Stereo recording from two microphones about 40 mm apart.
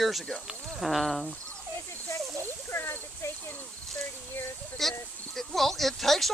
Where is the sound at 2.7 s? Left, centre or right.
Left.